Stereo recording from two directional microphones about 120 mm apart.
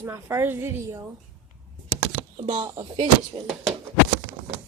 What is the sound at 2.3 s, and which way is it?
Speech, 40° right (ahead or behind).